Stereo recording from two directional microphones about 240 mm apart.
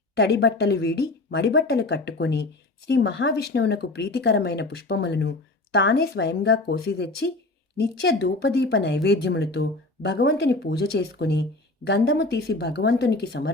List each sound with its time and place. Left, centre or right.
0.2 s speech: left